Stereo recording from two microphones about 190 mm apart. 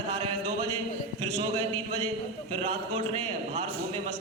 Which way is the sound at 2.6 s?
35° right (ahead or behind).